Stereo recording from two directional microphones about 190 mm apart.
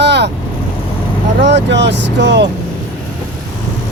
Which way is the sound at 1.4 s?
65° right (ahead or behind).